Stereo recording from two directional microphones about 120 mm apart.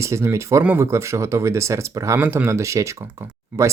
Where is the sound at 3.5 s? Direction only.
10° right (ahead or behind).